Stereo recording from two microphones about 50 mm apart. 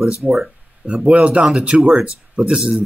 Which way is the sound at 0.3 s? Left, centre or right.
Right.